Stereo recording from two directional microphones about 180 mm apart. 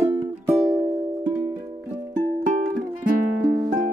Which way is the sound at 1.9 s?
45° right (ahead or behind).